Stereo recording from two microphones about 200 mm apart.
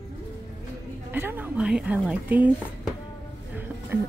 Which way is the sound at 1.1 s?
10° right (ahead or behind).